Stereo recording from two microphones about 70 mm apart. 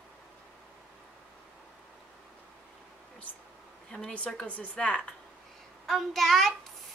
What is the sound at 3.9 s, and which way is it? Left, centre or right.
Speech, centre.